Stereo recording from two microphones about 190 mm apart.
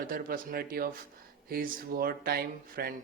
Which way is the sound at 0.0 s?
50° right (ahead or behind).